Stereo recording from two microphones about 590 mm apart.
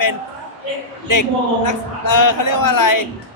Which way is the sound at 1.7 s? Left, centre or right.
Left.